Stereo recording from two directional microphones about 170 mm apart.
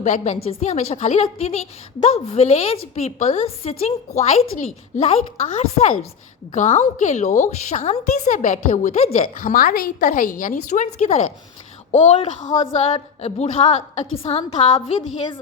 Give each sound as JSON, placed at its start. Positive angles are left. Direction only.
{"t": 0.0, "sound": "a woman's voice", "side_deg": 45}